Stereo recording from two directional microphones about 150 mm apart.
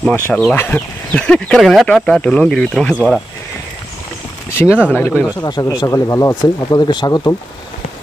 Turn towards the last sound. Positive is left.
turn(degrees=25)  # may be behind; listen again after turning